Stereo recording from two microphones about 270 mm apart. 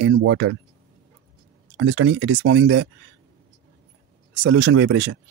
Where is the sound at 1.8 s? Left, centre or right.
Right.